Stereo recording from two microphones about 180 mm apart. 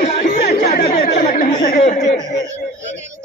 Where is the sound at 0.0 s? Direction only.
40° left (ahead or behind).